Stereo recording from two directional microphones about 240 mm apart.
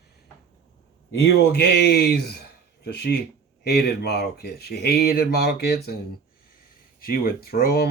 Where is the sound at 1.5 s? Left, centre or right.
Left.